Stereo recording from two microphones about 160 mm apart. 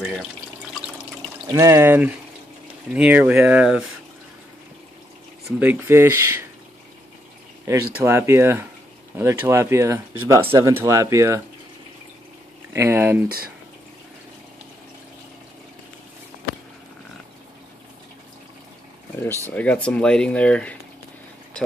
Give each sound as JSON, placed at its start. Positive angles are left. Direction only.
{"t": 0.0, "sound": "speech", "side_deg": -5}
{"t": 1.5, "sound": "speech", "side_deg": -20}
{"t": 5.6, "sound": "speech", "side_deg": -15}
{"t": 8.0, "sound": "speech", "side_deg": -15}
{"t": 12.7, "sound": "speech", "side_deg": -15}
{"t": 19.5, "sound": "speech", "side_deg": 10}